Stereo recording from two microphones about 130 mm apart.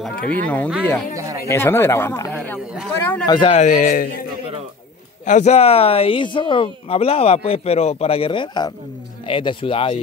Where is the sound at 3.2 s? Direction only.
35° left (ahead or behind).